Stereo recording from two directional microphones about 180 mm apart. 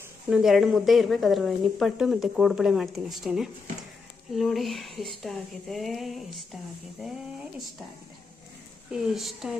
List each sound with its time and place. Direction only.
0.3 s speech: centre (ahead or behind)
8.9 s speech: centre (ahead or behind)